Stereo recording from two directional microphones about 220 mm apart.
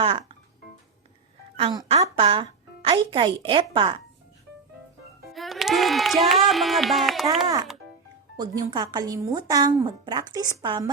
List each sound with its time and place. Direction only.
0.0 s a woman's voice: 25° right (ahead or behind)
1.5 s a woman's voice: 20° right (ahead or behind)
5.3 s speech: centre (ahead or behind)
7.4 s a woman's voice: 15° right (ahead or behind)